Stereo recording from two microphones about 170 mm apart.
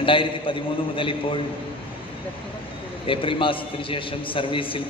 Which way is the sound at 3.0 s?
30° left (ahead or behind).